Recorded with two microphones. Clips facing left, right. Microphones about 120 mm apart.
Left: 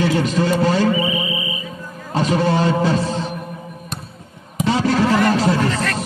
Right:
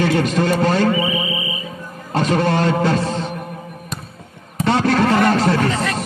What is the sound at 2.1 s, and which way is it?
A man's voice, 55° right (ahead or behind).